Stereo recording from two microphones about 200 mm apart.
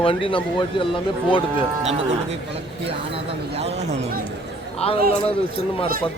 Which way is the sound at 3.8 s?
35° right (ahead or behind).